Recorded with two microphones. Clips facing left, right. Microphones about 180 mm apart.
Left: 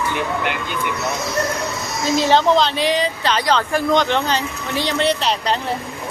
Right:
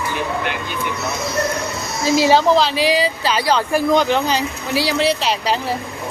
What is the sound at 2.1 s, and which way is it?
Speech, 10° right (ahead or behind).